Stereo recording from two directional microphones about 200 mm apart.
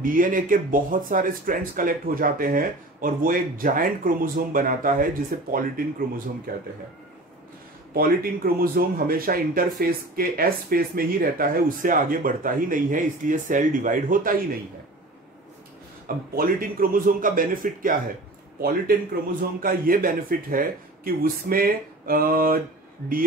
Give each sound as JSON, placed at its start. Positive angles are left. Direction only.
{"t": 0.0, "sound": "speech", "side_deg": -45}
{"t": 7.9, "sound": "speech", "side_deg": -45}
{"t": 16.3, "sound": "speech", "side_deg": -45}